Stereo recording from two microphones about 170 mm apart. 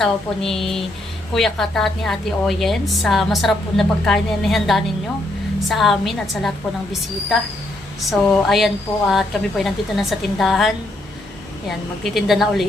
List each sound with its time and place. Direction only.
0.0 s a woman's voice: centre (ahead or behind)
8.1 s a woman's voice: 5° left (ahead or behind)
12.1 s a woman's voice: centre (ahead or behind)